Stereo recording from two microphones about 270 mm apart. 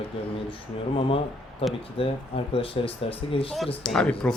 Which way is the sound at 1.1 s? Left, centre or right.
Centre.